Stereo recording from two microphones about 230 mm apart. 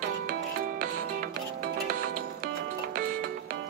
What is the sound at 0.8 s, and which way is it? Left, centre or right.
Music, right.